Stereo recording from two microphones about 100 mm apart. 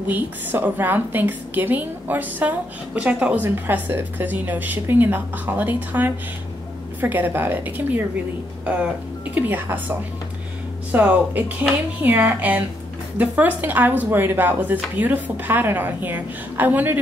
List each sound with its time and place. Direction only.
0.1 s a woman's voice: 20° right (ahead or behind)